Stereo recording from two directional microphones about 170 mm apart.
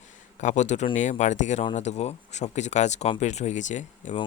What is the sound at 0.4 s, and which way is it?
Speech, 45° left (ahead or behind).